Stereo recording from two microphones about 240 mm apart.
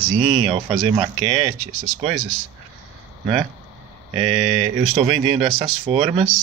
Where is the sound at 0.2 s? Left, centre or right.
Right.